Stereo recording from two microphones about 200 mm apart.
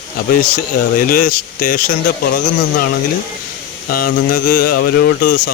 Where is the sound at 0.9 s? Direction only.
45° left (ahead or behind).